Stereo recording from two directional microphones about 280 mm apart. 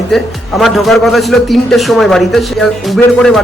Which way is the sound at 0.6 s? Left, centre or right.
Centre.